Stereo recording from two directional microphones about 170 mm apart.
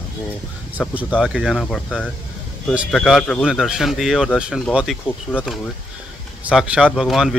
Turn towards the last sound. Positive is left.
turn(degrees=0)  # may be behind; listen again after turning